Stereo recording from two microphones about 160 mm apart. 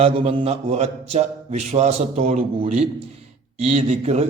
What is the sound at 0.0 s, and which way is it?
A man's voice, 35° right (ahead or behind).